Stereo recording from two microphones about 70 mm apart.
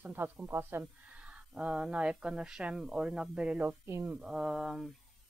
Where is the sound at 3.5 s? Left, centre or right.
Right.